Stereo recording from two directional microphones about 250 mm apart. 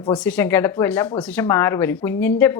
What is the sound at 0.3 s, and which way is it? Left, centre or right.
Speech, centre.